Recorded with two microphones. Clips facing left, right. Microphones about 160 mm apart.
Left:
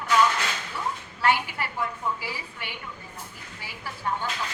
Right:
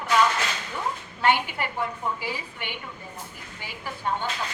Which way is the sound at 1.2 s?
20° right (ahead or behind).